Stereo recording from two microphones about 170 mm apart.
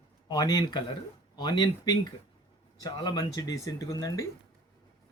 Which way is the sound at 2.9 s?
25° left (ahead or behind).